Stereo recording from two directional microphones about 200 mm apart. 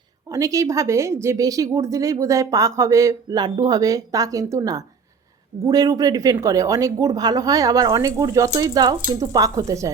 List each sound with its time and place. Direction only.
0.3 s speech: 15° right (ahead or behind)